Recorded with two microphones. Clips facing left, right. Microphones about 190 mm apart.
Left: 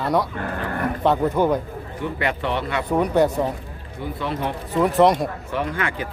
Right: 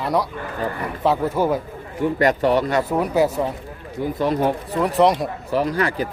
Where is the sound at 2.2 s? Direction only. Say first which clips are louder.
Right 7 dB; 40° right (ahead or behind).